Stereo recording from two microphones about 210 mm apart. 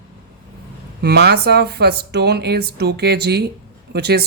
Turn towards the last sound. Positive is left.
turn(degrees=-50)  # may be behind; listen again after turning